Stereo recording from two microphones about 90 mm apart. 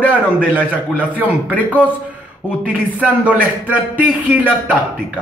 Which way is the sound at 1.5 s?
15° left (ahead or behind).